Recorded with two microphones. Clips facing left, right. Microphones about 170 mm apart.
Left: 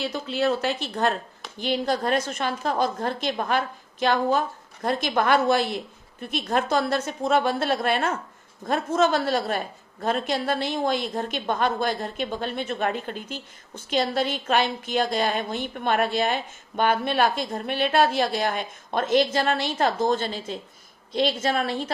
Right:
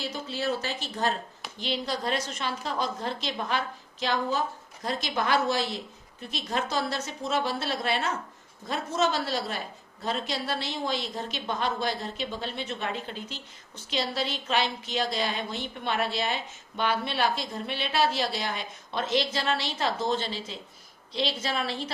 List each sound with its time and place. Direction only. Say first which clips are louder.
0.0 s a woman's voice: left 6 dB; 60° left (ahead or behind)